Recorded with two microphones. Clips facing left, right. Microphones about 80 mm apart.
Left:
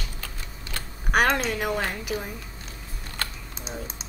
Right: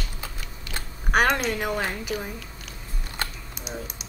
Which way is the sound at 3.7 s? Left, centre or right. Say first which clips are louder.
Right 1 dB; left.